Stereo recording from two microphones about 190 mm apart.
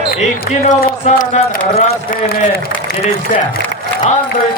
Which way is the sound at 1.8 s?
50° left (ahead or behind).